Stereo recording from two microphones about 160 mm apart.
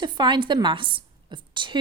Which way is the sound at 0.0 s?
30° right (ahead or behind).